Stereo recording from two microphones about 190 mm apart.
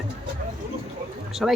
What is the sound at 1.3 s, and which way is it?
Speech, centre (ahead or behind).